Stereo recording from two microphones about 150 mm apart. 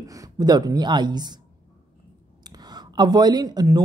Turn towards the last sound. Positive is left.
turn(degrees=-25)  # may be behind; listen again after turning